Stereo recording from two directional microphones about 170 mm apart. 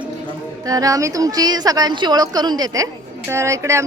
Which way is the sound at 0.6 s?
20° right (ahead or behind).